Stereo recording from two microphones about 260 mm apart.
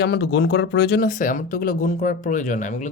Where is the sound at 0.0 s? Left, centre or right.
Left.